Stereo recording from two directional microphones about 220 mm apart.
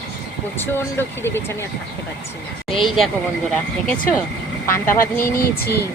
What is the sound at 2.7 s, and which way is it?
Speech, centre (ahead or behind).